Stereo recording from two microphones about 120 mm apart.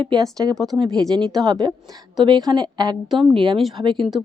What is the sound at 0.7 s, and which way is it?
A woman's voice, 45° right (ahead or behind).